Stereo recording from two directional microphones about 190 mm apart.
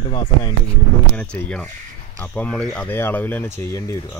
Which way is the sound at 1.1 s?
5° left (ahead or behind).